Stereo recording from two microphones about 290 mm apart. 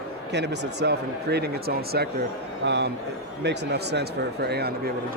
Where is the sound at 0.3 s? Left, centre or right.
Right.